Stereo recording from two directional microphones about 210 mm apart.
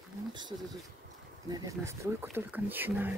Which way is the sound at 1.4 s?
15° right (ahead or behind).